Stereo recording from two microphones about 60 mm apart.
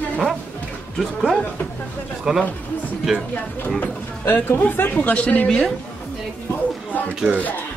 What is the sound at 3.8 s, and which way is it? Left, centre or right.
Speech, left.